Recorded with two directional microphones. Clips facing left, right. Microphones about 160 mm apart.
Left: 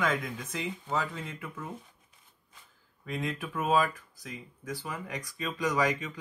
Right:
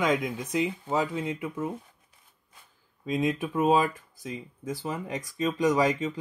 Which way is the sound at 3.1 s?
20° right (ahead or behind).